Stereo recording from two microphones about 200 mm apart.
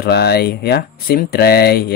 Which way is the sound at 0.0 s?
55° left (ahead or behind).